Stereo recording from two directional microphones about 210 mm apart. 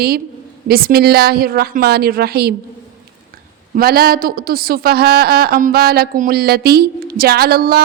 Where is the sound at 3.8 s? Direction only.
45° right (ahead or behind).